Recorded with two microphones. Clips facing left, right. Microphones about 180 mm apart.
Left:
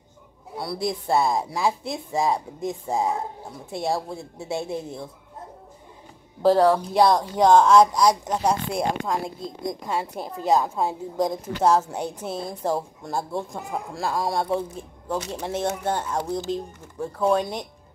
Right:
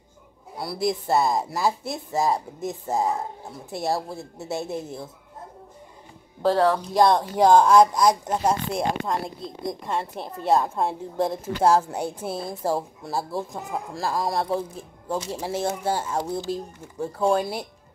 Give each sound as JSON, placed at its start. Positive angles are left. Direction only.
{"t": 0.6, "sound": "speech", "side_deg": 0}
{"t": 6.4, "sound": "a woman's voice", "side_deg": 10}
{"t": 11.1, "sound": "speech", "side_deg": -5}